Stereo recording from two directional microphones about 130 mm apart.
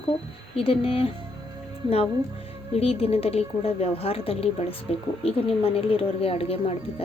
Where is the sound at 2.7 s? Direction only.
50° left (ahead or behind).